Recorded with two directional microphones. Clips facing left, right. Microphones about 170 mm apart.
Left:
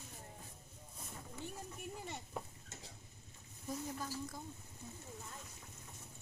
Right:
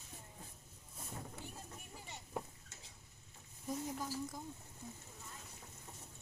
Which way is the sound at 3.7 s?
15° right (ahead or behind).